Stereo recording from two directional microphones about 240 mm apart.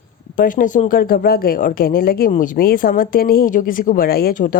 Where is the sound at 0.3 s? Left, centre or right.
Left.